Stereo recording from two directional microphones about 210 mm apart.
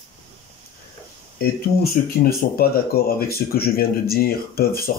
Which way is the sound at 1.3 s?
45° left (ahead or behind).